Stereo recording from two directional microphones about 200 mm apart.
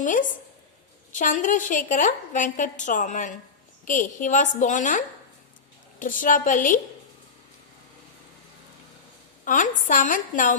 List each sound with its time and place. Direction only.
0.0 s a woman's voice: 40° left (ahead or behind)
9.4 s a woman's voice: 40° left (ahead or behind)